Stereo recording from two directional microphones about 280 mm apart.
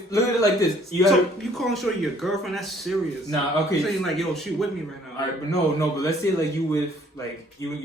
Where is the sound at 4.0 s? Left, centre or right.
Centre.